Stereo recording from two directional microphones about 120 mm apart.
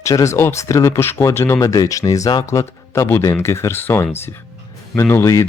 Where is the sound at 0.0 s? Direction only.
25° left (ahead or behind).